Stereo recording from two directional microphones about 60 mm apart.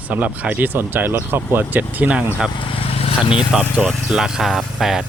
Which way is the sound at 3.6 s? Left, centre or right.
Centre.